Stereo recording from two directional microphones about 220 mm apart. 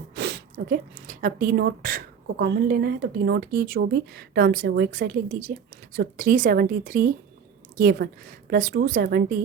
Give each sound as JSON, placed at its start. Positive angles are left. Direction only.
{"t": 0.2, "sound": "speech", "side_deg": -45}